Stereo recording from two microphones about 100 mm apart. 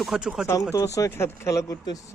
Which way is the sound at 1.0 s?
25° left (ahead or behind).